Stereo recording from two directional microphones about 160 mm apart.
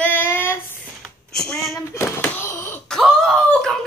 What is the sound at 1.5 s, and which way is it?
Child singing, centre (ahead or behind).